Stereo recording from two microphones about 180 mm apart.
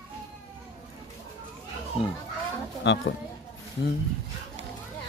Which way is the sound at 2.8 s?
85° left.